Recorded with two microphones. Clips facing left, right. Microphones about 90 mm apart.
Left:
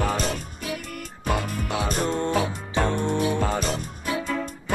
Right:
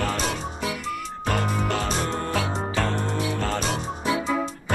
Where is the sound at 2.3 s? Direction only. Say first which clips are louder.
Left 1 dB; 15° left (ahead or behind).